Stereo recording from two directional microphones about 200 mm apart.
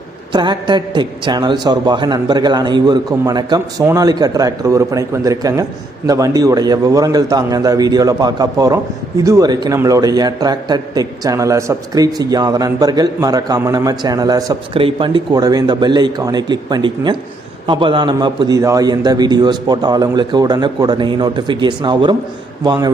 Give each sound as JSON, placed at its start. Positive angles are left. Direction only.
{"t": 0.3, "sound": "a man's voice", "side_deg": -20}